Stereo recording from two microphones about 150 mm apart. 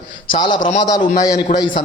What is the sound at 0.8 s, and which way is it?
Speech, 25° left (ahead or behind).